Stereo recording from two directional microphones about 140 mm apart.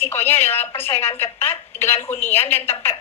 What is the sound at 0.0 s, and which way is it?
A woman's voice, 15° left (ahead or behind).